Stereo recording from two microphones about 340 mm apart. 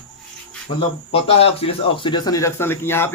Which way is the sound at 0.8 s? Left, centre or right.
Centre.